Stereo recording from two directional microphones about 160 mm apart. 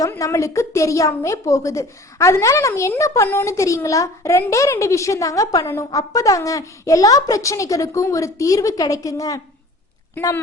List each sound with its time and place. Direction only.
0.0 s a woman's voice: 20° left (ahead or behind)